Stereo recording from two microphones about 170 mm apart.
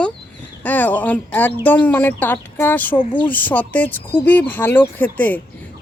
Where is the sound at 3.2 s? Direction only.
10° left (ahead or behind).